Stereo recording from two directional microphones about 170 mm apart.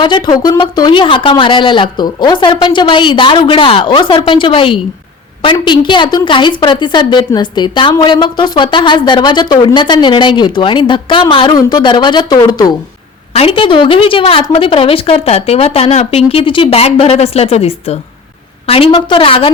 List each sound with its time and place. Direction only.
0.0 s a woman's voice: 25° left (ahead or behind)
13.3 s a woman's voice: 35° left (ahead or behind)